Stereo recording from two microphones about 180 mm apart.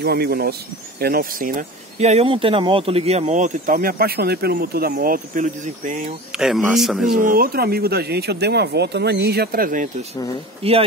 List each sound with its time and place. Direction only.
0.0 s speech: 60° right (ahead or behind); by 6.1 s 45° right (ahead or behind)
6.3 s speech: 5° right (ahead or behind)
7.2 s speech: 50° right (ahead or behind)
10.6 s speech: 30° right (ahead or behind)